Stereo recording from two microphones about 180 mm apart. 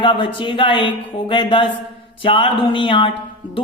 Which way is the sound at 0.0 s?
25° left (ahead or behind).